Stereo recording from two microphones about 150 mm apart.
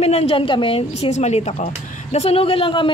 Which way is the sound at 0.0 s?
45° left (ahead or behind).